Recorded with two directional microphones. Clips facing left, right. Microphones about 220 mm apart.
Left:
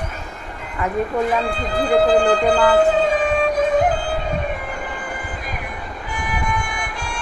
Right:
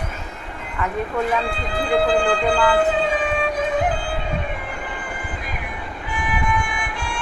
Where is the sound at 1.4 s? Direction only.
45° left (ahead or behind).